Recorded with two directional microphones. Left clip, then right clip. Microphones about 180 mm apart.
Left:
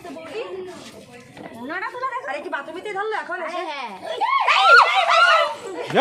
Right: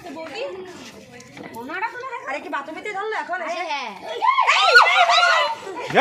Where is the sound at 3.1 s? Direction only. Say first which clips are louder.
Right 1 dB; centre (ahead or behind).